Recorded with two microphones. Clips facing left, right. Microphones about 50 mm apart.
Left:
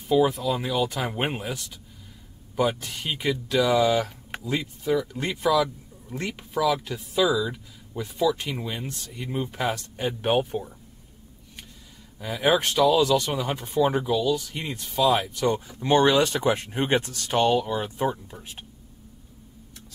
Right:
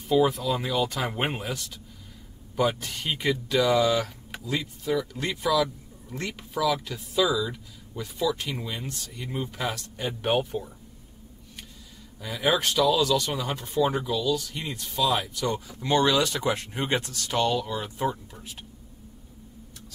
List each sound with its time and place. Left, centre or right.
0.1 s speech: centre
2.7 s speech: centre; by 4.6 s left
4.8 s speech: centre
12.2 s speech: centre